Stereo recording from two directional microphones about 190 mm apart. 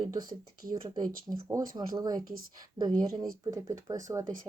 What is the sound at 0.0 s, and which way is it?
Speech, 20° right (ahead or behind).